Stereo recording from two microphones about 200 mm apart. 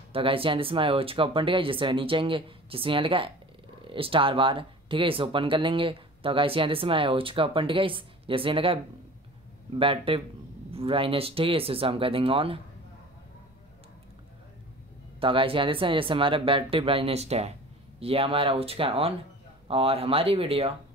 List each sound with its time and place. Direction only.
0.1 s speech: 25° right (ahead or behind)
9.8 s speech: 25° right (ahead or behind)
15.1 s speech: 25° right (ahead or behind)